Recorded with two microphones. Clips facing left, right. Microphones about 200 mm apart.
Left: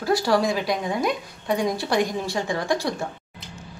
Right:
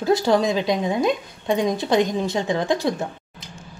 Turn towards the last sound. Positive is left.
turn(degrees=0)  # may be behind; listen again after turning